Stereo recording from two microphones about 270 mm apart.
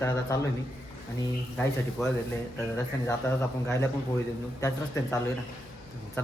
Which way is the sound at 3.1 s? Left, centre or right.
Centre.